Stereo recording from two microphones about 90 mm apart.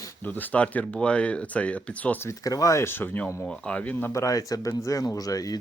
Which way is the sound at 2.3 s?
40° left (ahead or behind).